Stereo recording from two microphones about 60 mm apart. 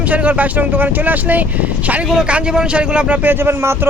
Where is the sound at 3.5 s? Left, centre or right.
Right.